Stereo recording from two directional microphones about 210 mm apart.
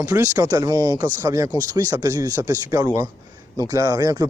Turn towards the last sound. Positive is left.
turn(degrees=-20)  # may be behind; listen again after turning